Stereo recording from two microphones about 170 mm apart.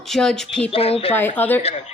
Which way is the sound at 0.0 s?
Centre (ahead or behind).